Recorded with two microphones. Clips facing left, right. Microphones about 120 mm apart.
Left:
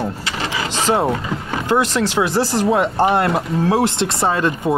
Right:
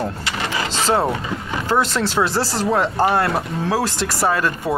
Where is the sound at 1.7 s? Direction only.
15° left (ahead or behind).